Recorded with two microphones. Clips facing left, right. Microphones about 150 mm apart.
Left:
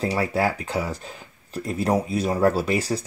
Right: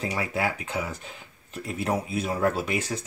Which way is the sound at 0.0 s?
35° left (ahead or behind).